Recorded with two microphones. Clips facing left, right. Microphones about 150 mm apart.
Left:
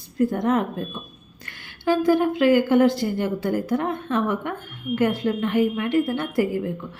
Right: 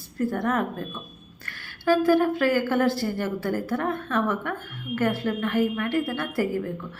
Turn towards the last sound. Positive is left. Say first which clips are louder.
# left 3 dB
turn(degrees=20)  # may be behind; listen again after turning